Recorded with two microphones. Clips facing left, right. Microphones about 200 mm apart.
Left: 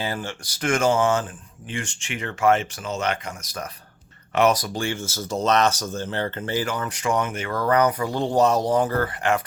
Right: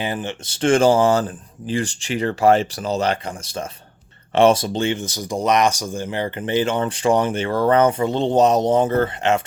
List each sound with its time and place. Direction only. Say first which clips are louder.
0.0 s speech: right 3 dB; 20° right (ahead or behind)